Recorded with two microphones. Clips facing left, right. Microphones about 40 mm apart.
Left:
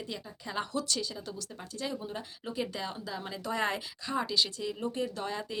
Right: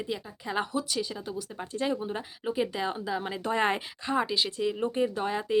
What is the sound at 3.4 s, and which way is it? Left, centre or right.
Speech, right.